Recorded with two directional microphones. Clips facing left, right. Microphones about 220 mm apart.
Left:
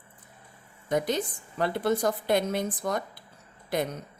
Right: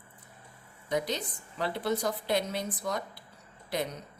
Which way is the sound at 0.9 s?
50° left (ahead or behind).